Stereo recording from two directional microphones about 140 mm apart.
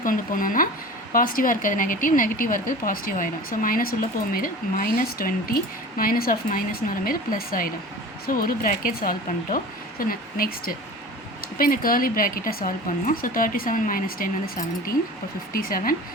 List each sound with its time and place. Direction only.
0.0 s a woman's voice: 75° left (ahead or behind)